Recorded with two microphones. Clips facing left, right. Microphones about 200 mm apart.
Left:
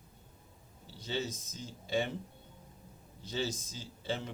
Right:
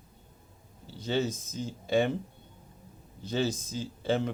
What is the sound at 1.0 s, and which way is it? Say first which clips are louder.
Speech: right 8 dB; 55° right (ahead or behind).